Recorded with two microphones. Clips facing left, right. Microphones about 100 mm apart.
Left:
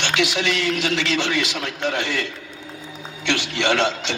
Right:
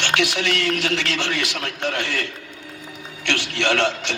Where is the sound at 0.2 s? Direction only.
20° left (ahead or behind).